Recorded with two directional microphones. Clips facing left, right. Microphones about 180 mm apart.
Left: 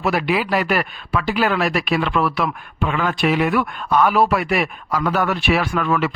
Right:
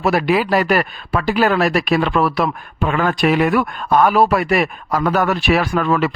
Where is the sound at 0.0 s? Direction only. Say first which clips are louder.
Right 4 dB; 40° right (ahead or behind).